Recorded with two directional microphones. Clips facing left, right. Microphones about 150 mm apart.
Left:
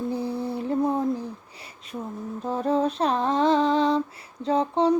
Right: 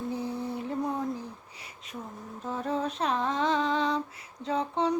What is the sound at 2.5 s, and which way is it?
Female singing, 35° left (ahead or behind).